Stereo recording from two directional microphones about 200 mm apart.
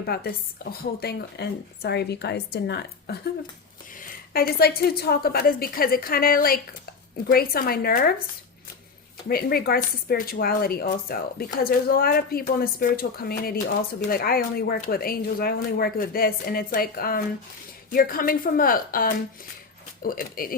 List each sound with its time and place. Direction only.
0.0 s a woman's voice: 50° left (ahead or behind)
9.3 s speech: 50° left (ahead or behind)